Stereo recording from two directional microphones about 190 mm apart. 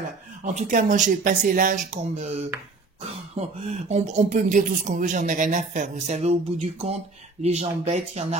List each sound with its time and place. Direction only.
0.5 s speech: 40° right (ahead or behind)